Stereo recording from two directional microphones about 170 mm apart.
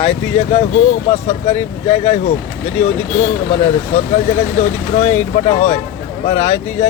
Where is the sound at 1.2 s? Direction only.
40° left (ahead or behind).